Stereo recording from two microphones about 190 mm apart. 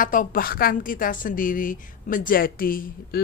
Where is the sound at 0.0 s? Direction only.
45° left (ahead or behind).